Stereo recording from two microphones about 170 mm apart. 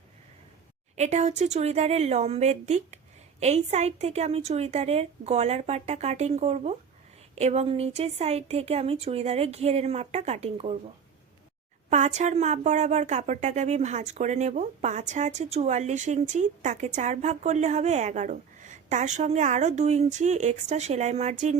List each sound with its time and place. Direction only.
0.9 s speech: 40° right (ahead or behind)
11.9 s a woman's voice: 45° right (ahead or behind)